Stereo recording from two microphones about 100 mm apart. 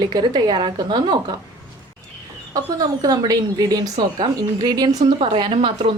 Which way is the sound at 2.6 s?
40° right (ahead or behind).